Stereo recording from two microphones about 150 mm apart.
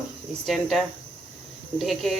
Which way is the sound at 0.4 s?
Centre (ahead or behind).